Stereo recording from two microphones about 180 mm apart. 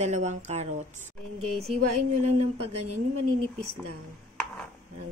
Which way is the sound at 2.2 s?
35° right (ahead or behind).